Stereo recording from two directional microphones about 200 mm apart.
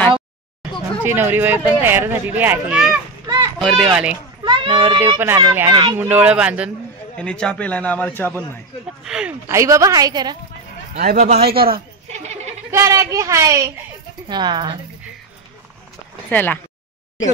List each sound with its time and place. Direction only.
1.0 s speech: 10° right (ahead or behind)
3.3 s children playing: 20° right (ahead or behind)
3.5 s a child's voice: centre (ahead or behind)
4.5 s children playing: 25° right (ahead or behind)
5.0 s speech: 15° right (ahead or behind)
7.2 s a man's voice: 5° left (ahead or behind)
9.0 s speech: 5° right (ahead or behind)
11.0 s speech: 40° right (ahead or behind)
11.5 s a woman's voice: 50° right (ahead or behind)
12.1 s goat: 35° right (ahead or behind)
12.7 s speech: 15° right (ahead or behind)
16.3 s a man's voice: 10° left (ahead or behind)